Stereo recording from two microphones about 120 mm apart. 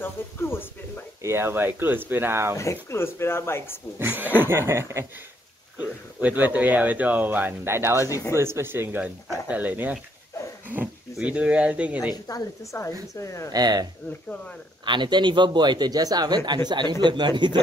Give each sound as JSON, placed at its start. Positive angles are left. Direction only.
{"t": 0.0, "sound": "a sound", "side_deg": 20}
{"t": 1.2, "sound": "speech", "side_deg": -20}
{"t": 2.5, "sound": "speech", "side_deg": 25}
{"t": 4.0, "sound": "speech", "side_deg": -15}
{"t": 8.1, "sound": "speech", "side_deg": 25}
{"t": 8.4, "sound": "speech", "side_deg": -20}
{"t": 12.1, "sound": "speech", "side_deg": 30}
{"t": 13.5, "sound": "a man's voice", "side_deg": -35}
{"t": 14.9, "sound": "a man's voice", "side_deg": -40}